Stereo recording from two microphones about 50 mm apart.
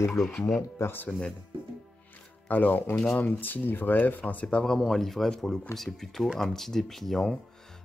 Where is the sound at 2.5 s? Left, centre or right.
Left.